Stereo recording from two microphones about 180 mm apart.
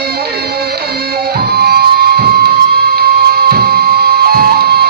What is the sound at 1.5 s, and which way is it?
Music, 60° right (ahead or behind).